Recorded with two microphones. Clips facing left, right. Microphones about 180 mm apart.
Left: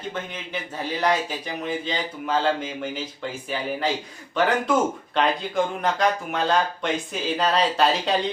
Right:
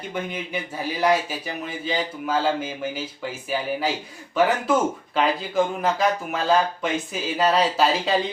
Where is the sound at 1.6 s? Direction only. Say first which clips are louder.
Right 1 dB; 5° right (ahead or behind).